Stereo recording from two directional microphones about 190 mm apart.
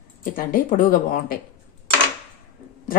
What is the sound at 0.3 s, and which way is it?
Speech, 45° left (ahead or behind).